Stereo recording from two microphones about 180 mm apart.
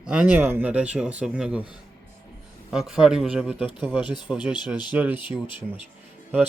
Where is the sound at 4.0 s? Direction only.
25° left (ahead or behind).